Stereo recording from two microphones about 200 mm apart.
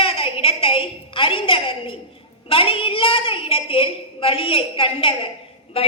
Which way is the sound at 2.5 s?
25° left (ahead or behind).